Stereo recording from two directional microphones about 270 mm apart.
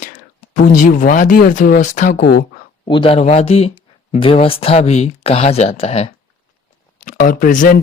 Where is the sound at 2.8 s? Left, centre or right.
Centre.